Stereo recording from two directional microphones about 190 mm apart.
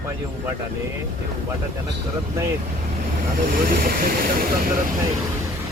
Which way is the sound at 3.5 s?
50° right (ahead or behind).